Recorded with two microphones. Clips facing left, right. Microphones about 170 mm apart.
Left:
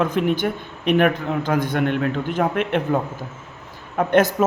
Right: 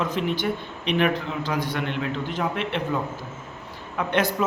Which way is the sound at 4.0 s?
45° left (ahead or behind).